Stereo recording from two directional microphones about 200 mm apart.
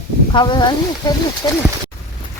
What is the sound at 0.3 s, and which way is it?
Speech, 25° left (ahead or behind).